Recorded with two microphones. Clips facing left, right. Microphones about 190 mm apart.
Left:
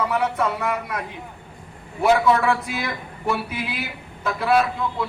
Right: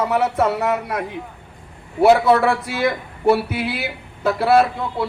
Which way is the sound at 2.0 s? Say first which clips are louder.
Right 4 dB; 40° right (ahead or behind).